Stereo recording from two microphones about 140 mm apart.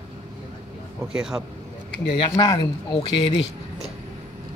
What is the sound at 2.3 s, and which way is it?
Speech, 30° left (ahead or behind).